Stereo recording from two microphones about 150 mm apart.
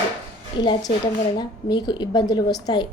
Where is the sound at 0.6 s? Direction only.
30° left (ahead or behind).